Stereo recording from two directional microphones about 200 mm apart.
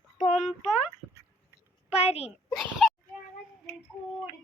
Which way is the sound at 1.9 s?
30° left (ahead or behind).